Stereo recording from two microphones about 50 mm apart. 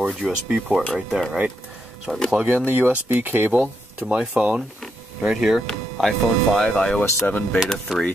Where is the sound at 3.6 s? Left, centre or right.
Right.